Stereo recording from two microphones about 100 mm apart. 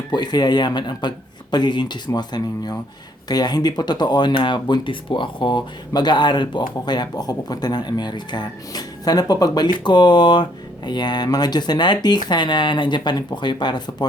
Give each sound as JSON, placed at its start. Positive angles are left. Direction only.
{"t": 0.1, "sound": "speech", "side_deg": 45}